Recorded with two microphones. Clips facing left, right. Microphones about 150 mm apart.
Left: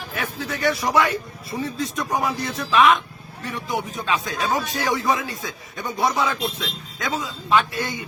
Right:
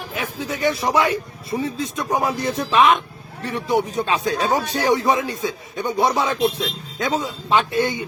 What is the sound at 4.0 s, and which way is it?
Speech, 25° right (ahead or behind).